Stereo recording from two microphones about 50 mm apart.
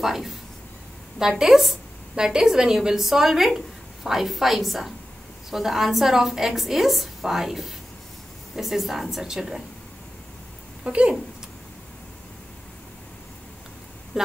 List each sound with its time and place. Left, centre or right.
0.0 s a woman's voice: centre
1.4 s a woman's voice: centre
10.8 s speech: right
14.1 s speech: centre